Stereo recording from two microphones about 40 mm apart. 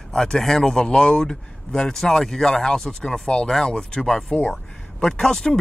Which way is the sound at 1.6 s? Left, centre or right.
Centre.